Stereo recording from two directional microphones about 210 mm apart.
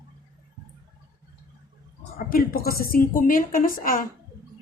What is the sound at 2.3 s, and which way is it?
A woman's voice, 45° left (ahead or behind).